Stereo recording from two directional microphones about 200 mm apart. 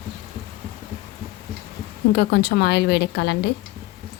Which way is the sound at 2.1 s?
55° left (ahead or behind).